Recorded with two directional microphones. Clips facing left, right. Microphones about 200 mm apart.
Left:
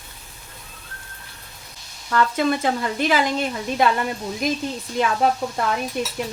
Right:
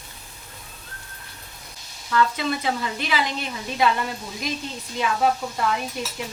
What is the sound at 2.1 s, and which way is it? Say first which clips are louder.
Speech: left 3 dB; 45° left (ahead or behind).